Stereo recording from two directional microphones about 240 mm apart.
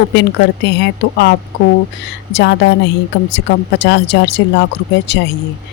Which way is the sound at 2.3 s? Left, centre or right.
Left.